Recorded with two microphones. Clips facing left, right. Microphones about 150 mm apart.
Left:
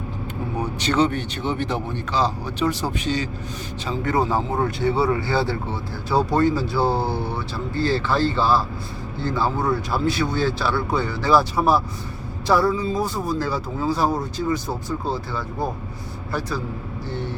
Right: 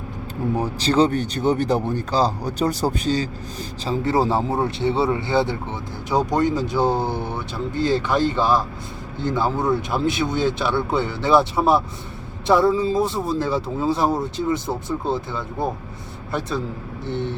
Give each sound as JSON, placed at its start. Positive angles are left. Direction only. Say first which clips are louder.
{"t": 0.6, "sound": "speech", "louder": "right 2 dB", "side_deg": -35}